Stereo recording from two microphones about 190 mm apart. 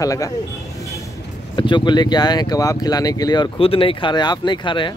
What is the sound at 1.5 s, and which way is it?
Speech, 25° left (ahead or behind).